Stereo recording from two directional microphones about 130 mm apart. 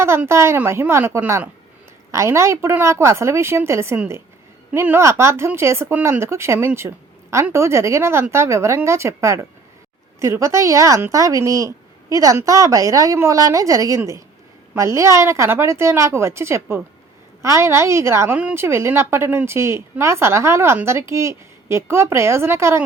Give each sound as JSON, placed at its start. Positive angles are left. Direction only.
{"t": 0.3, "sound": "a woman's voice", "side_deg": -20}